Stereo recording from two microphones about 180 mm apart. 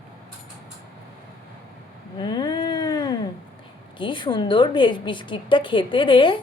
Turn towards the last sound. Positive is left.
turn(degrees=30)  # may be behind; listen again after turning